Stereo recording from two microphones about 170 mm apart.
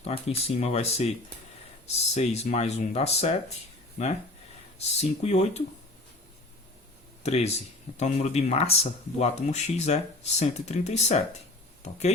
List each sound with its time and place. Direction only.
0.0 s speech: 40° left (ahead or behind)
2.1 s speech: 40° left (ahead or behind)
4.9 s speech: 40° left (ahead or behind)
7.2 s speech: 40° left (ahead or behind)